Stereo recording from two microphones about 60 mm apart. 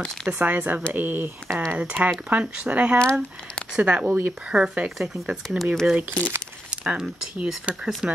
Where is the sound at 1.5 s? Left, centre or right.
Right.